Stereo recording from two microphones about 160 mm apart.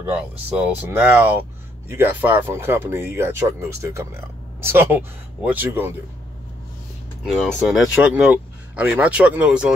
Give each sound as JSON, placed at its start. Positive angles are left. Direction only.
{"t": 0.0, "sound": "speech", "side_deg": -10}
{"t": 7.2, "sound": "speech", "side_deg": 0}